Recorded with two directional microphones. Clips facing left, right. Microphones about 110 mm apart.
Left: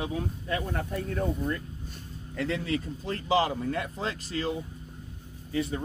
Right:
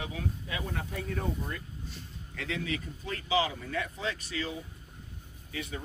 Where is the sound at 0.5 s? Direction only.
45° left (ahead or behind).